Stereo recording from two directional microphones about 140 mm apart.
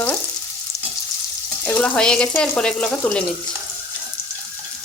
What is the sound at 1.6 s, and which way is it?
Frying, 15° left (ahead or behind).